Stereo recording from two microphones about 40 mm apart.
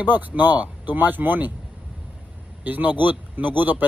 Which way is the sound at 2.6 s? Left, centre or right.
Right.